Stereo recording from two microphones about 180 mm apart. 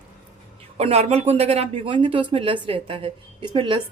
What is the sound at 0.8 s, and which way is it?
A woman's voice, 35° right (ahead or behind).